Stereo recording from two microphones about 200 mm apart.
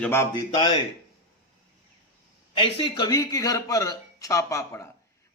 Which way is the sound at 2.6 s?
25° left (ahead or behind).